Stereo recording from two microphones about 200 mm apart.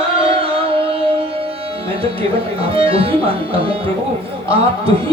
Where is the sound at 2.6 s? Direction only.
25° right (ahead or behind).